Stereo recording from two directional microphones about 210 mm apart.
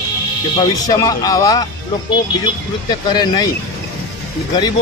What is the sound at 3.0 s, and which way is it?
Speech, 20° left (ahead or behind).